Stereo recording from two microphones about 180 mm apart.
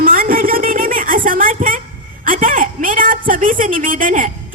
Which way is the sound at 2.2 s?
50° right (ahead or behind).